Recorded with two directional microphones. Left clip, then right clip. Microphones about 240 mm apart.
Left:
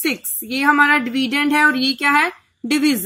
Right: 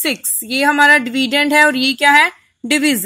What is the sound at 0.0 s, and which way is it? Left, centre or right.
A woman's voice, right.